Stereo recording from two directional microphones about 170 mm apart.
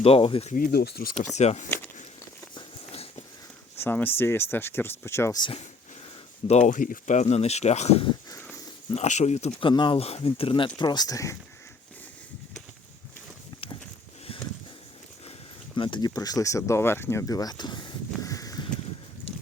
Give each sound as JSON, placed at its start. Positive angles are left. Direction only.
{"t": 0.0, "sound": "speech", "side_deg": 35}
{"t": 0.5, "sound": "speech", "side_deg": 60}
{"t": 1.4, "sound": "speech", "side_deg": 40}
{"t": 2.6, "sound": "a sound", "side_deg": 35}
{"t": 3.8, "sound": "speech", "side_deg": 10}
{"t": 5.4, "sound": "speech", "side_deg": 30}
{"t": 6.5, "sound": "speech", "side_deg": 45}
{"t": 8.3, "sound": "wheeze", "side_deg": 15}
{"t": 9.0, "sound": "speech", "side_deg": 40}
{"t": 15.7, "sound": "speech", "side_deg": 30}
{"t": 18.2, "sound": "a sound", "side_deg": 20}